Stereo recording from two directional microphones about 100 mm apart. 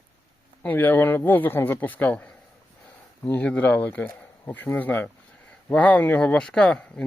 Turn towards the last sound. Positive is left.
turn(degrees=10)  # may be behind; listen again after turning